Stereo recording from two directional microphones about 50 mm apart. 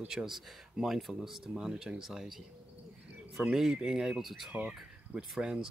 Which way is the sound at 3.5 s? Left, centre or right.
Centre.